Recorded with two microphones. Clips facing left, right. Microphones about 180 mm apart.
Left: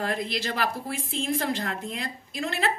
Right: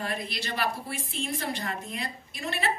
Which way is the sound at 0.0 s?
90° left.